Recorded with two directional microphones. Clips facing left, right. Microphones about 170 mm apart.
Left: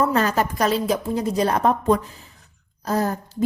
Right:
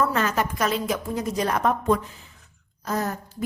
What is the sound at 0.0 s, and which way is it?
A woman's voice, 35° left (ahead or behind).